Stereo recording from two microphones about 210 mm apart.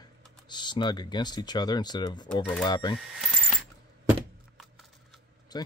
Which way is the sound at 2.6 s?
20° left (ahead or behind).